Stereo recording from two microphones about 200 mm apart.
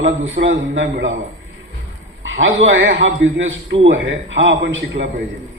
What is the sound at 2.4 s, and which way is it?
A man's voice, 70° right (ahead or behind).